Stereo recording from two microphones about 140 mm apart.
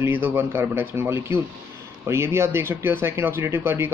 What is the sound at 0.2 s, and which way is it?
Speech, 15° right (ahead or behind).